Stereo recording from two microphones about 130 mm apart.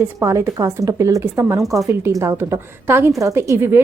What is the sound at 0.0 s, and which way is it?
A woman's voice, 20° right (ahead or behind).